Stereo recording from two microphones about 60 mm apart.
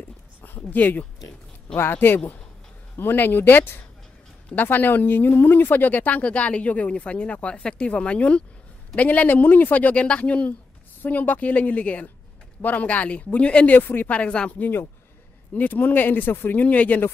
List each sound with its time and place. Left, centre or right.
0.4 s a sound: left
1.8 s speech: left; by 13.7 s centre
13.7 s speech: left
14.1 s speech: left
16.6 s speech: left